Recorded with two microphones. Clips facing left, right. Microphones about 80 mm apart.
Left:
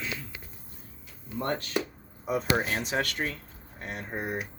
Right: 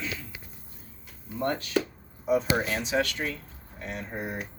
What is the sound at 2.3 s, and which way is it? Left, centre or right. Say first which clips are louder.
Speech: right 2 dB; left.